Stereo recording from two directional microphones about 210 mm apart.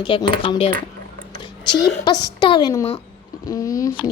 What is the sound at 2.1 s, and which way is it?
Speech, 20° left (ahead or behind).